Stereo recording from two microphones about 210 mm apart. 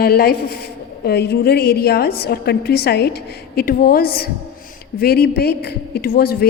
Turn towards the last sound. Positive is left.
turn(degrees=45)  # may be behind; listen again after turning